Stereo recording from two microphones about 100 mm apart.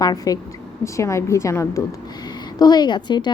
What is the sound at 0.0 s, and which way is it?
Speech, 40° left (ahead or behind).